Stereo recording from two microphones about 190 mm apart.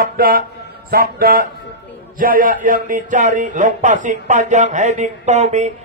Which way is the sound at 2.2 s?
45° right (ahead or behind).